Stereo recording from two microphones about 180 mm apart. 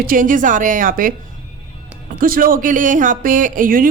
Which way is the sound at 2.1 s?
50° right (ahead or behind).